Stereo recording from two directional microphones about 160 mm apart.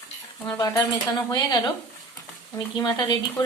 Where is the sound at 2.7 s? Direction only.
25° left (ahead or behind).